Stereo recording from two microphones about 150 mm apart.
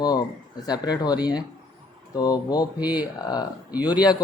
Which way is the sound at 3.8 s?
25° left (ahead or behind).